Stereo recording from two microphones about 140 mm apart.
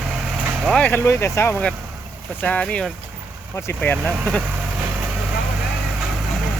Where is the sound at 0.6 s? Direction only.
10° left (ahead or behind).